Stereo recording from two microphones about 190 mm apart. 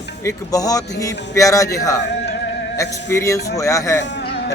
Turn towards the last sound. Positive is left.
turn(degrees=60)  # may be behind; listen again after turning